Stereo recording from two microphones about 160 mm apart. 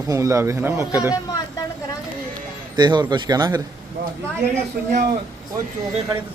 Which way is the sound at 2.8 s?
30° right (ahead or behind).